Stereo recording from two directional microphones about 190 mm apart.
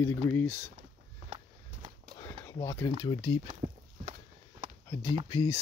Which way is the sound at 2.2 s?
15° left (ahead or behind).